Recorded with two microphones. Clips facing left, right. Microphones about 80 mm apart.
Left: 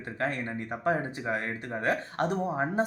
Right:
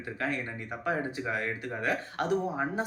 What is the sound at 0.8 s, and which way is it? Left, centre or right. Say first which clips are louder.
Speech: left 2 dB; left.